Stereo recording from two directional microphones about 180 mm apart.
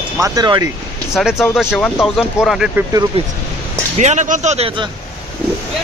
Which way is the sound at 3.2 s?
35° right (ahead or behind).